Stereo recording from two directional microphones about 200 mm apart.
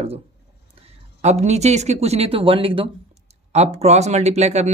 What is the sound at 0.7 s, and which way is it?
Speech, 30° right (ahead or behind).